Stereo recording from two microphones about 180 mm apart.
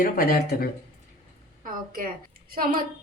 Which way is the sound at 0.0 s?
55° left (ahead or behind).